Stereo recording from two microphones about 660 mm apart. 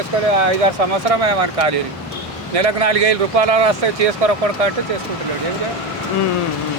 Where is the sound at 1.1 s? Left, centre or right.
Right.